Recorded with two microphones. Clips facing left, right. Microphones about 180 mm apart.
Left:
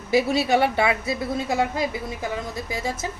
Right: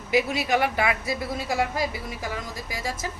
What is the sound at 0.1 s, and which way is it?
A woman's voice, 30° left (ahead or behind).